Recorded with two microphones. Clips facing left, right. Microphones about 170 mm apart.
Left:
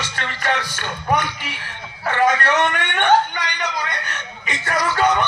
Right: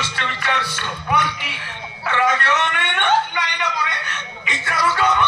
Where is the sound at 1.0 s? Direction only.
45° left (ahead or behind).